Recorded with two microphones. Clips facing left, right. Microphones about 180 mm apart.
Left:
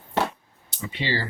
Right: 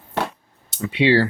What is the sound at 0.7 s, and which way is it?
Speech, 70° right (ahead or behind).